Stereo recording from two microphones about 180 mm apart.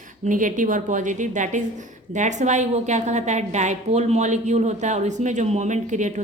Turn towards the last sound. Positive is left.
turn(degrees=-40)  # may be behind; listen again after turning